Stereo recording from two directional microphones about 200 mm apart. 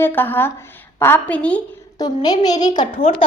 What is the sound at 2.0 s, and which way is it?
Speech, 20° left (ahead or behind).